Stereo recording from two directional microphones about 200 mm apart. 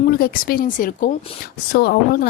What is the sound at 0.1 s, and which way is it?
A woman's voice, 50° left (ahead or behind).